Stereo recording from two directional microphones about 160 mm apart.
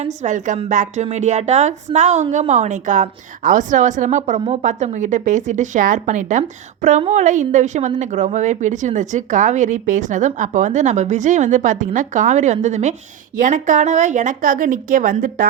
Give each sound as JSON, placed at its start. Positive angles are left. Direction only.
{"t": 0.0, "sound": "speech", "side_deg": -45}
{"t": 4.4, "sound": "speech", "side_deg": -40}